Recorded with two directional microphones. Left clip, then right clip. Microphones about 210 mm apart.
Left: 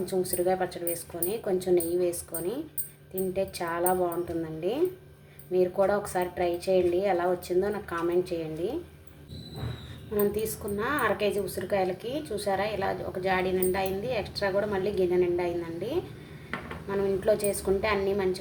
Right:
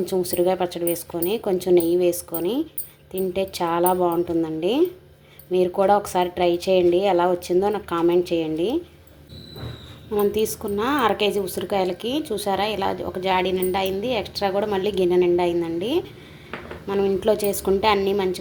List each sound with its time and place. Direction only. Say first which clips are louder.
0.0 s a woman's voice: right 7 dB; 35° right (ahead or behind)
5.5 s a woman's voice: right 6 dB; 35° right (ahead or behind)
10.2 s a woman's voice: right 7 dB; 30° right (ahead or behind)